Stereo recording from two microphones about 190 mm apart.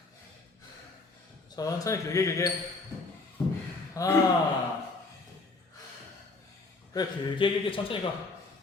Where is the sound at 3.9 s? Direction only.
15° left (ahead or behind).